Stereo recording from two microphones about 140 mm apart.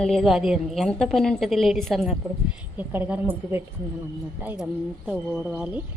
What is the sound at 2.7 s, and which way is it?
Speech, 15° right (ahead or behind).